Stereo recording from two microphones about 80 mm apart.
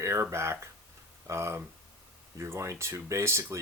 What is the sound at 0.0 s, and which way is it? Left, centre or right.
Speech, right.